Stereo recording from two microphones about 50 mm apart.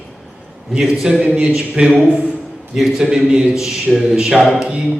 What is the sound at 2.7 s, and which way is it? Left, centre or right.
Speech, centre.